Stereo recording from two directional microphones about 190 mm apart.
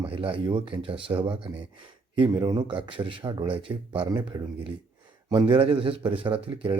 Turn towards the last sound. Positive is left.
turn(degrees=-30)  # may be behind; listen again after turning